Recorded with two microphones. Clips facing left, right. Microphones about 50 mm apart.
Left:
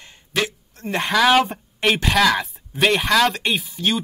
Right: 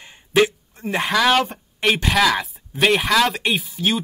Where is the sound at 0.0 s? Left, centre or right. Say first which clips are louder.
Right 7 dB; centre.